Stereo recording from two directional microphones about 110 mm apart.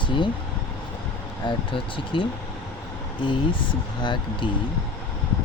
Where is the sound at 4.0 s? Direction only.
45° left (ahead or behind).